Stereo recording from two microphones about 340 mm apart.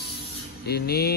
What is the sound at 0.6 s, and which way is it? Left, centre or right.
Speech, left.